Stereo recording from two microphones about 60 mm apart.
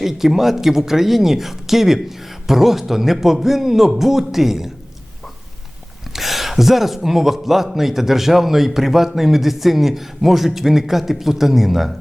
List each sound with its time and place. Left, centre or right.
0.0 s speech: centre
6.1 s speech: centre